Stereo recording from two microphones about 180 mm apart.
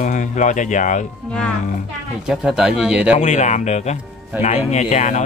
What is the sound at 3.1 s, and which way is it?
Speech, 40° left (ahead or behind).